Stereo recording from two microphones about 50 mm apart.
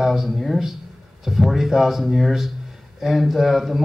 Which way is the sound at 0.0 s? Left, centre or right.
Centre.